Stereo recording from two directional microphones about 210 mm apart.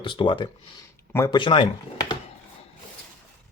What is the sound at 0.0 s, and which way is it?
Speech, 25° left (ahead or behind).